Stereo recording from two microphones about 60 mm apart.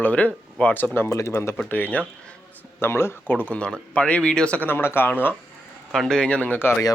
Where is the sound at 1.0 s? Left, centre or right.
Left.